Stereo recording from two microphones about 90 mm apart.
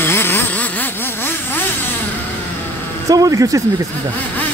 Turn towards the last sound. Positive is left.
turn(degrees=-40)  # may be behind; listen again after turning